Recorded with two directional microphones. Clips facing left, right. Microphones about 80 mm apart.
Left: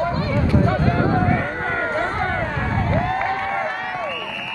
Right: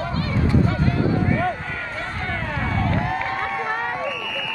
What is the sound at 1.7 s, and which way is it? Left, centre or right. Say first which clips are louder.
Run: left 8 dB; left.